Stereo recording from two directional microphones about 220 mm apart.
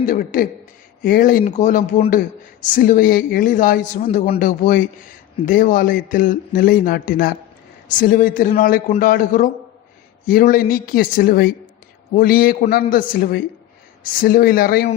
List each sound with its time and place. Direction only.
0.0 s a man's voice: 40° left (ahead or behind)